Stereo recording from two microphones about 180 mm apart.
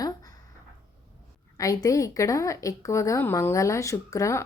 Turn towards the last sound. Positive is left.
turn(degrees=15)  # may be behind; listen again after turning